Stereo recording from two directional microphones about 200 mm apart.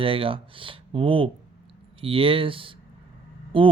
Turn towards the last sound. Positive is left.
turn(degrees=-25)  # may be behind; listen again after turning